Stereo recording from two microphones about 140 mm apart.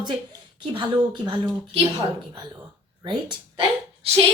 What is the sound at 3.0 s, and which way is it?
Speech, 35° right (ahead or behind).